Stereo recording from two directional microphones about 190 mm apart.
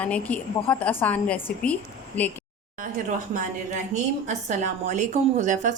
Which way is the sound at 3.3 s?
45° right (ahead or behind).